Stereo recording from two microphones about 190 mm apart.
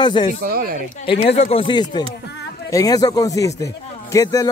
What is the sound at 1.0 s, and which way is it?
A man's voice, 30° left (ahead or behind).